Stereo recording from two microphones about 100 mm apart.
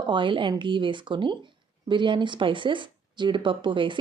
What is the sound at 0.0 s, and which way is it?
A woman's voice, 55° right (ahead or behind).